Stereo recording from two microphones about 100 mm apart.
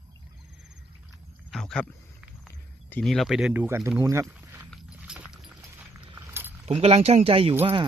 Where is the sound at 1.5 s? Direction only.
5° left (ahead or behind).